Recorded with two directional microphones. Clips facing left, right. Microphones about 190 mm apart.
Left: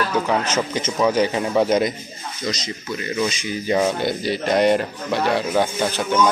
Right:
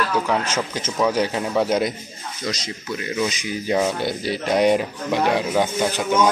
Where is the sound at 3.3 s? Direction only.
5° right (ahead or behind).